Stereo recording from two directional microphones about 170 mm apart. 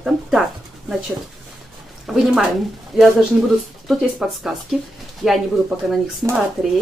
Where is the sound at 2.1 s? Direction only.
Centre (ahead or behind).